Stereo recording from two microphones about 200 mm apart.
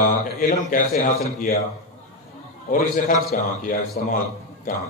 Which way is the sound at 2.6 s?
45° left (ahead or behind).